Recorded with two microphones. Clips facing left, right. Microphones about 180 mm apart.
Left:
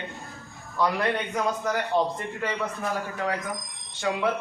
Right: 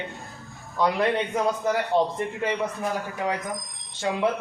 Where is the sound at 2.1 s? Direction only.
20° right (ahead or behind).